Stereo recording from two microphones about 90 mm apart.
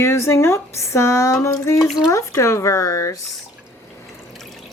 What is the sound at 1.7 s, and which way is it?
Speech, centre (ahead or behind).